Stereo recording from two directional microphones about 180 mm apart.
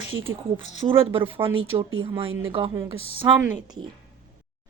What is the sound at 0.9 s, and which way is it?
Speech, 30° right (ahead or behind).